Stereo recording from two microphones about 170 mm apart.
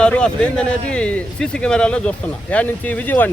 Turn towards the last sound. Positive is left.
turn(degrees=10)  # may be behind; listen again after turning